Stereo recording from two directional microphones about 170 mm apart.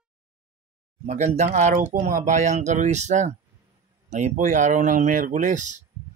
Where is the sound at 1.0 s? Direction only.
40° right (ahead or behind).